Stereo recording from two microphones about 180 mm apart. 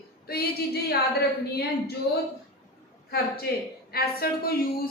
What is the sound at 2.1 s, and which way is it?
A woman's voice, 65° left (ahead or behind).